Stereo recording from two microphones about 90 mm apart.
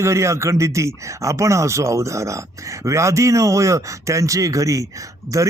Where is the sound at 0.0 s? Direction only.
30° right (ahead or behind).